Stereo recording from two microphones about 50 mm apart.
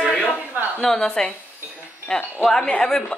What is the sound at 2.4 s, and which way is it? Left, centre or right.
Speech, centre.